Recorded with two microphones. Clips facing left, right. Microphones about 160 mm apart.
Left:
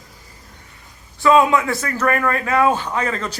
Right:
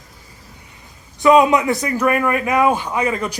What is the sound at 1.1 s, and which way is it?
A man's voice, 20° right (ahead or behind).